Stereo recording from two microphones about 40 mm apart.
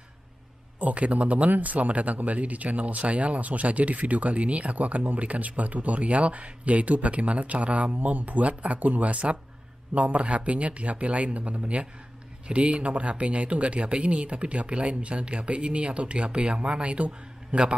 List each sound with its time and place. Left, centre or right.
0.7 s speech: right